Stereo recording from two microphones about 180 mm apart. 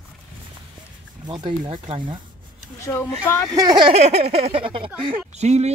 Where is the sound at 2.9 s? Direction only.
10° left (ahead or behind).